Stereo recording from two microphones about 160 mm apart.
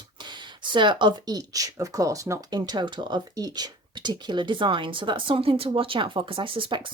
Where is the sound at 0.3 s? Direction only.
30° right (ahead or behind).